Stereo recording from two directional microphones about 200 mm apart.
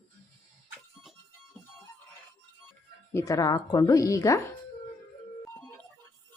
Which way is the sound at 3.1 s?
15° left (ahead or behind).